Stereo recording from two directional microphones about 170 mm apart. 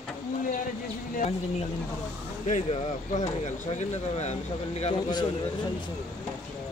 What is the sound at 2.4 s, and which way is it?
Speech, 45° left (ahead or behind).